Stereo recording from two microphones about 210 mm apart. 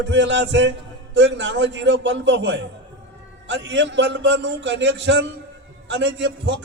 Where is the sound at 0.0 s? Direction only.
60° right (ahead or behind).